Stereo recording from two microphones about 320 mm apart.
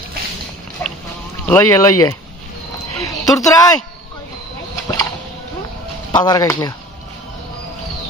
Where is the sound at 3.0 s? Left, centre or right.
Centre.